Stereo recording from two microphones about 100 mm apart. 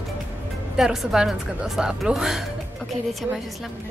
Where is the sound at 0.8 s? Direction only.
5° right (ahead or behind).